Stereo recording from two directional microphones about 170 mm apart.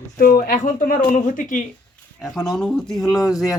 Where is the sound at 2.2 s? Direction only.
Centre (ahead or behind).